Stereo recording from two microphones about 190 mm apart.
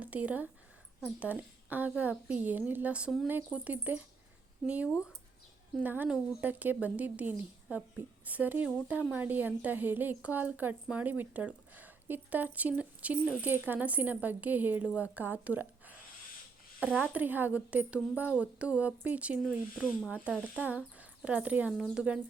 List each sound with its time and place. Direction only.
0.0 s a woman's voice: 5° right (ahead or behind)